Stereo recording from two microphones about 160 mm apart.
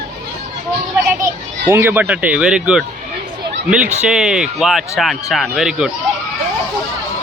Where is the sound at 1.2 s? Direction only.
15° right (ahead or behind).